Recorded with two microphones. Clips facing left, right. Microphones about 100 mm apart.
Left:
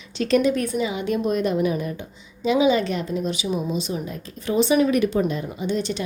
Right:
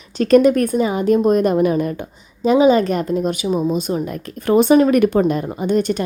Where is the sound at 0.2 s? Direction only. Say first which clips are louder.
Right 7 dB; 45° right (ahead or behind).